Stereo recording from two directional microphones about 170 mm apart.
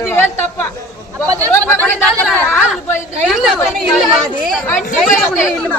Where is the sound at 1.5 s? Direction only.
10° left (ahead or behind).